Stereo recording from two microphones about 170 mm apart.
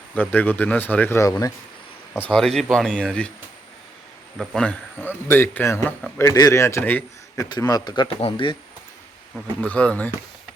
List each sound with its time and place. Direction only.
0.1 s speech: 10° left (ahead or behind)
2.1 s speech: 5° left (ahead or behind)
4.4 s speech: 5° left (ahead or behind)
7.5 s a man's voice: 25° left (ahead or behind)
9.6 s speech: 10° left (ahead or behind)